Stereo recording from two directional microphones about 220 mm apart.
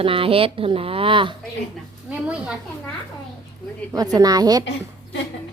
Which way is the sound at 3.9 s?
15° right (ahead or behind).